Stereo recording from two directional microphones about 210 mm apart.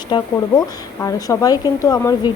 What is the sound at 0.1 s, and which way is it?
A woman's voice, 20° left (ahead or behind).